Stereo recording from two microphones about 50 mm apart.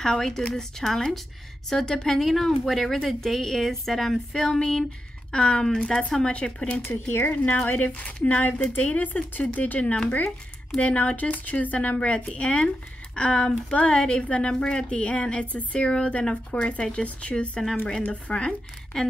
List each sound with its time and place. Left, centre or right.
0.0 s speech: centre
6.8 s speech: left
7.4 s speech: left; by 19.1 s centre